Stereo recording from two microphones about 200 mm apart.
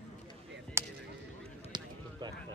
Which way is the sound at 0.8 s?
15° right (ahead or behind).